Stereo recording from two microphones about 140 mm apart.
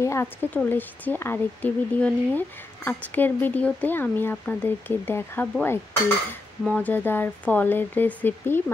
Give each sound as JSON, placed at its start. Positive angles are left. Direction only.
{"t": 0.0, "sound": "speech", "side_deg": 20}